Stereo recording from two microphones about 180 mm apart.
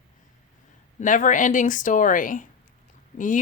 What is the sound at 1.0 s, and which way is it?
Speech, 45° left (ahead or behind).